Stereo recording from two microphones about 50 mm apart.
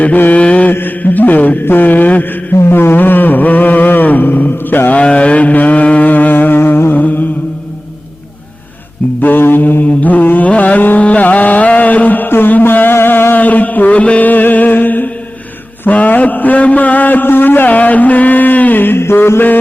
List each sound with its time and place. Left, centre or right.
0.3 s mantra: left
0.7 s mantra: left
2.6 s a sound: left
4.9 s vehicle: left
7.0 s music: left
9.2 s mantra: left
13.4 s mantra: left
15.9 s a sound: left